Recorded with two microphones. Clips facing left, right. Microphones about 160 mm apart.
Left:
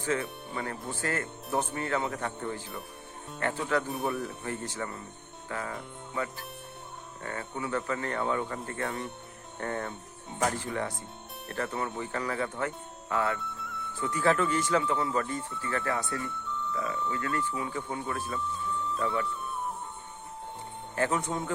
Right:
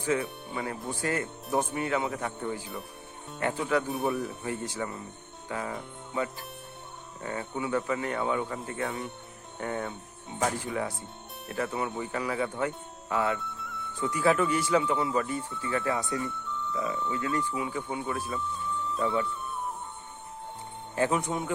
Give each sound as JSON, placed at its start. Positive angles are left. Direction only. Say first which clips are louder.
{"t": 0.2, "sound": "speech", "louder": "right 2 dB", "side_deg": -10}
{"t": 3.8, "sound": "speech", "louder": "right 2 dB", "side_deg": 0}
{"t": 4.4, "sound": "speech", "louder": "right 2 dB", "side_deg": -10}
{"t": 5.5, "sound": "music", "louder": "right 2 dB", "side_deg": -15}
{"t": 6.1, "sound": "speech", "louder": "right 3 dB", "side_deg": -20}
{"t": 13.4, "sound": "music", "louder": "even", "side_deg": 0}
{"t": 14.0, "sound": "speech", "louder": "right 1 dB", "side_deg": -10}
{"t": 16.5, "sound": "music", "louder": "left 1 dB", "side_deg": 0}
{"t": 17.2, "sound": "speech", "louder": "right 2 dB", "side_deg": -10}
{"t": 19.2, "sound": "music", "louder": "even", "side_deg": 0}
{"t": 20.9, "sound": "speech", "louder": "right 2 dB", "side_deg": -15}